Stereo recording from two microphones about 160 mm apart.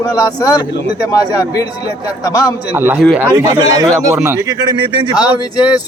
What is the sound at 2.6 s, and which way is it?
Speech, 10° right (ahead or behind).